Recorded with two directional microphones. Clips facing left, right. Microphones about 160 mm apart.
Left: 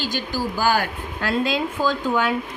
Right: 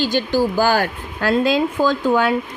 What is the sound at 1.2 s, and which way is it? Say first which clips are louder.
Speech: right 6 dB; 40° right (ahead or behind).